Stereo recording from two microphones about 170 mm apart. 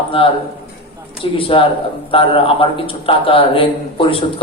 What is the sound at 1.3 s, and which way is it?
A man's voice, 30° left (ahead or behind).